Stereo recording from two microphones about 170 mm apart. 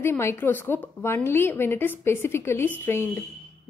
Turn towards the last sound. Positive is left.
turn(degrees=15)  # may be behind; listen again after turning